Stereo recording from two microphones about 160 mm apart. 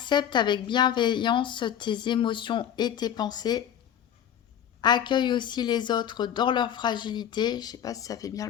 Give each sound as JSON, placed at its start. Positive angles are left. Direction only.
{"t": 0.0, "sound": "a woman's voice", "side_deg": 30}
{"t": 4.8, "sound": "a woman's voice", "side_deg": 25}